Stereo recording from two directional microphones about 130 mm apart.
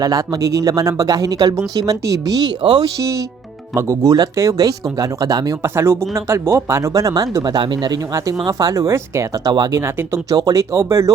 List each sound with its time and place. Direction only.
0.0 s speech: 25° right (ahead or behind)
3.8 s speech: 25° right (ahead or behind)
9.5 s speech: 35° right (ahead or behind)
9.8 s speech: 25° right (ahead or behind)